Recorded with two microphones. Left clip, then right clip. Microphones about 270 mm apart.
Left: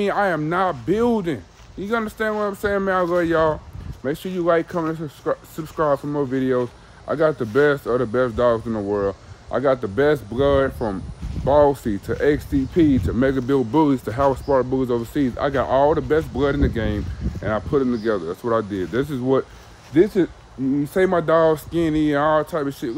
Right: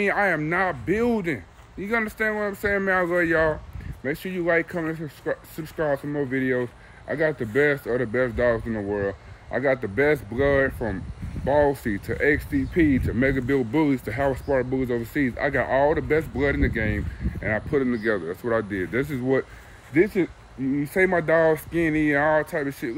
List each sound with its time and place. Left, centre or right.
0.0 s speech: centre